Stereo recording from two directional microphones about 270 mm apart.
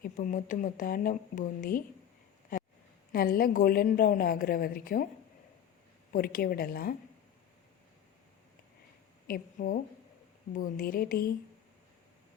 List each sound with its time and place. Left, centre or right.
0.0 s speech: left
3.1 s a woman's voice: left
6.1 s a woman's voice: left
9.2 s a woman's voice: left